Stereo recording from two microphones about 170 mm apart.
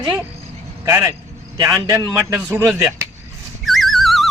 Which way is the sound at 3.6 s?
Centre (ahead or behind).